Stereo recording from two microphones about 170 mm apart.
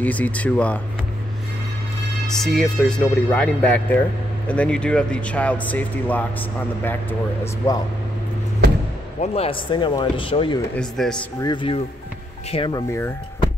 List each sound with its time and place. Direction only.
0.0 s speech: 10° left (ahead or behind)
2.2 s speech: 5° left (ahead or behind)
9.2 s speech: 35° left (ahead or behind)
10.8 s speech: 5° left (ahead or behind)
11.4 s speech: 30° left (ahead or behind)
12.7 s speech: 15° left (ahead or behind)